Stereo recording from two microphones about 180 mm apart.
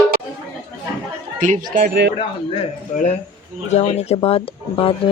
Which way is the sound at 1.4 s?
50° right (ahead or behind).